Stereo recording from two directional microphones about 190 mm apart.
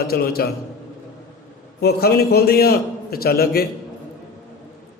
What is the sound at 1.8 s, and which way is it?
A man's voice, 55° left (ahead or behind).